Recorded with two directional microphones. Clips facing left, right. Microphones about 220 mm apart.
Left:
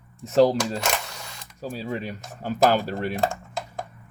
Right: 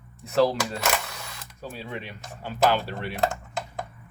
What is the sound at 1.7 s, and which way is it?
Speech, 40° left (ahead or behind).